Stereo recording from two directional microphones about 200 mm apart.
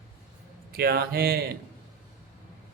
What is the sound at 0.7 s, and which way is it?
Speech, 50° right (ahead or behind).